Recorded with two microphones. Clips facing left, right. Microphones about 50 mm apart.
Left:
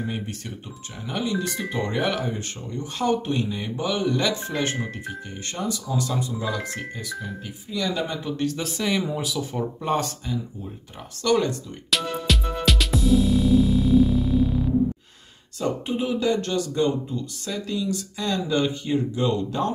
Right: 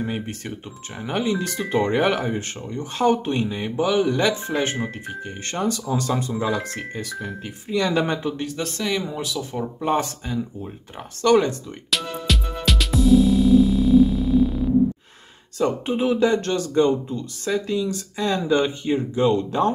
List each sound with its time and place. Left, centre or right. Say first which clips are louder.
0.0 s speech: right 3 dB; right
5.0 s speech: right 2 dB; right
8.5 s speech: even; centre
9.9 s speech: right 2 dB; right
11.9 s music: even; centre
15.6 s speech: right 4 dB; right